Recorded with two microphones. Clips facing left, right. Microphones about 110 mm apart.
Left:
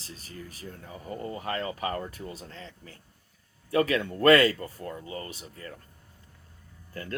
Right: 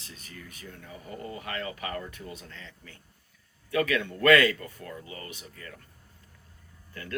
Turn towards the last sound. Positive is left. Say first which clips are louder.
# left 4 dB
turn(degrees=40)  # may be behind; listen again after turning